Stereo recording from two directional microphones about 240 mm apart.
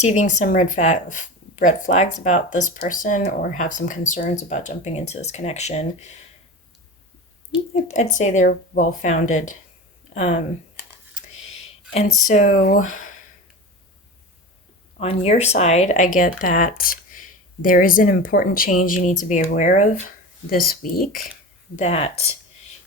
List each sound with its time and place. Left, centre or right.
0.0 s speech: left
7.5 s speech: left
12.3 s speech: left
14.9 s speech: left
21.8 s speech: left